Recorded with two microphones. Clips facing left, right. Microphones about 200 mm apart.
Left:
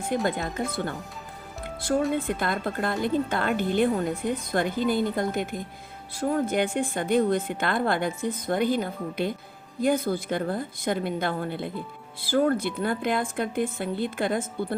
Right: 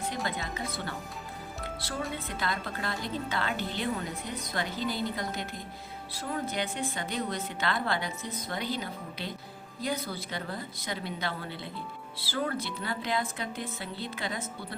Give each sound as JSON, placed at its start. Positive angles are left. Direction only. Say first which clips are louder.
{"t": 0.1, "sound": "a woman's voice", "louder": "left 8 dB", "side_deg": 50}
{"t": 2.2, "sound": "a woman's voice", "louder": "left 7 dB", "side_deg": 50}